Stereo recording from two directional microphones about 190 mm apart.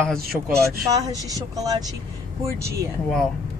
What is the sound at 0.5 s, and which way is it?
Speech, 20° right (ahead or behind).